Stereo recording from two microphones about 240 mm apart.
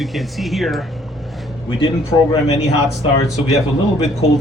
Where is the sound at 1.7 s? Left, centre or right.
Centre.